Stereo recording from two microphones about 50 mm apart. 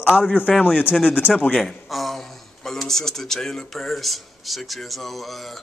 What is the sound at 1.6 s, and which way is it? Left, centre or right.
Speech, centre.